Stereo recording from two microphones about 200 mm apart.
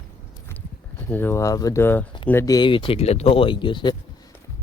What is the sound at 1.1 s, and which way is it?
Speech, 10° left (ahead or behind).